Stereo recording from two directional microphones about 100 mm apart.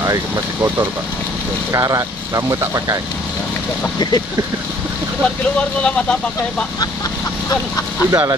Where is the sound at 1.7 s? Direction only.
35° right (ahead or behind).